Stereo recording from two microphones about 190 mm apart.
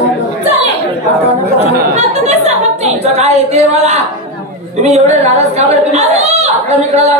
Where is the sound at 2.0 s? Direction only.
35° right (ahead or behind).